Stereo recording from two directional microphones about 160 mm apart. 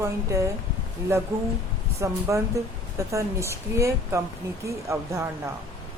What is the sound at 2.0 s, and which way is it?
A woman's voice, 20° right (ahead or behind).